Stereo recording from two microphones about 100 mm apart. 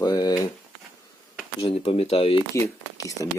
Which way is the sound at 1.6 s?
75° left (ahead or behind).